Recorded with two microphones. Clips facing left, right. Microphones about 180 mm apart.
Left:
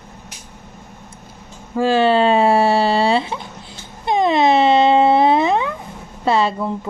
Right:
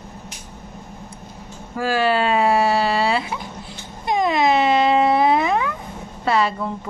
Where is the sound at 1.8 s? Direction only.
25° left (ahead or behind).